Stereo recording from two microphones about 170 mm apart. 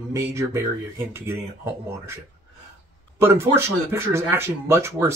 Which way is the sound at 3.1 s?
15° right (ahead or behind).